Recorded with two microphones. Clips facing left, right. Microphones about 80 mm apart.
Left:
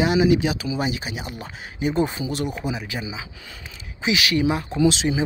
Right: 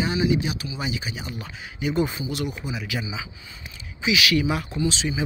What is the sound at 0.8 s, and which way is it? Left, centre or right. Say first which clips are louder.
Speech: left 4 dB; left.